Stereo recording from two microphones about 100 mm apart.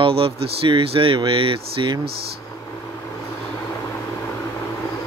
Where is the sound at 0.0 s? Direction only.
65° right (ahead or behind).